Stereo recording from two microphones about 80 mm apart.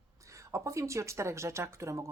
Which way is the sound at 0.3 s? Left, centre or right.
Right.